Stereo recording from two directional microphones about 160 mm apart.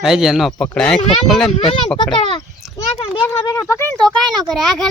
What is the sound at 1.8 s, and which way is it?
Speech, 30° left (ahead or behind).